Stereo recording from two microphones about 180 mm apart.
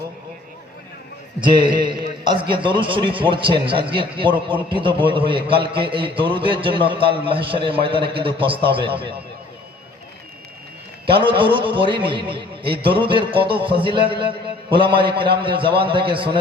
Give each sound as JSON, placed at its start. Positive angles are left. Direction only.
{"t": 1.4, "sound": "a man's voice", "side_deg": -25}
{"t": 11.2, "sound": "a man's voice", "side_deg": -30}
{"t": 15.2, "sound": "a man's voice", "side_deg": -25}